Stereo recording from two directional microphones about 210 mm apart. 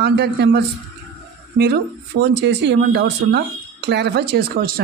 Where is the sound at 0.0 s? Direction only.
55° right (ahead or behind).